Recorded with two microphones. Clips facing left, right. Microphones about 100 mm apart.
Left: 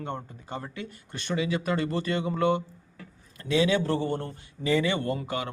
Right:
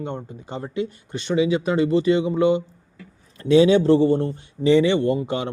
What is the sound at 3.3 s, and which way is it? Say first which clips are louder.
A man's voice: right 9 dB; 30° right (ahead or behind).